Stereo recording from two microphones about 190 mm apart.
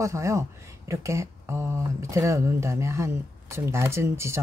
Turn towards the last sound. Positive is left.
turn(degrees=-15)  # may be behind; listen again after turning